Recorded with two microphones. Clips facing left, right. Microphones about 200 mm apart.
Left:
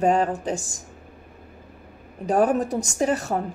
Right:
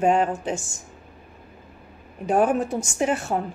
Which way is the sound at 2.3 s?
35° left (ahead or behind).